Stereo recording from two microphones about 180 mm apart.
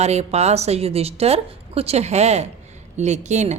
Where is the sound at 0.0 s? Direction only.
35° right (ahead or behind).